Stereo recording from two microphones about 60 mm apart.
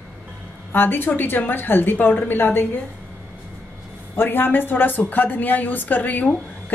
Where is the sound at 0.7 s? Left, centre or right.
Left.